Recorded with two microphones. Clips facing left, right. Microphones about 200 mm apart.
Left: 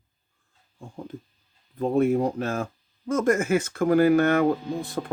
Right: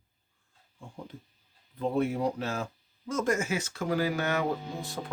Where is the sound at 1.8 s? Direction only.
50° left (ahead or behind).